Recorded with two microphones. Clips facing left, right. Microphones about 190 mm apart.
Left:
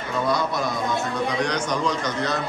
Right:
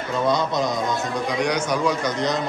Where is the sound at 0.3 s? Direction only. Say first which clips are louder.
Right 3 dB; 20° right (ahead or behind).